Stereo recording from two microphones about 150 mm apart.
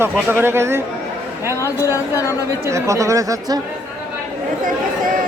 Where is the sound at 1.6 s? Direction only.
20° left (ahead or behind).